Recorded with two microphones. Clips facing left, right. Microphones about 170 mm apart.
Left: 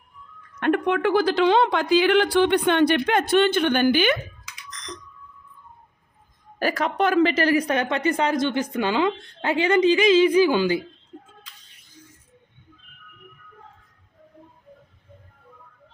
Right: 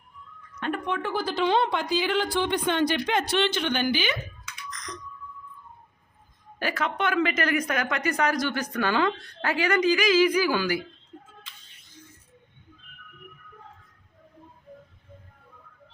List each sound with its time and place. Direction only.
0.6 s a woman's voice: 65° left (ahead or behind)
6.6 s speech: 40° left (ahead or behind); by 10.8 s 20° left (ahead or behind)